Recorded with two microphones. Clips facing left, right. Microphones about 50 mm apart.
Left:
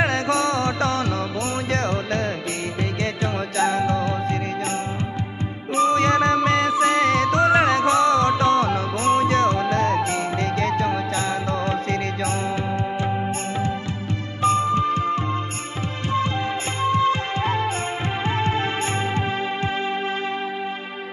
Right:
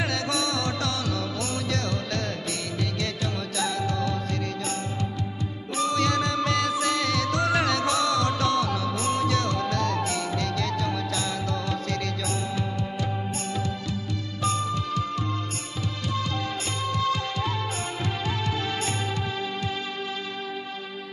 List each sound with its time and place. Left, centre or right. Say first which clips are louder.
0.0 s music: left 7 dB; left
5.8 s music: left 7 dB; left
14.4 s music: left 9 dB; left
16.8 s music: left 7 dB; left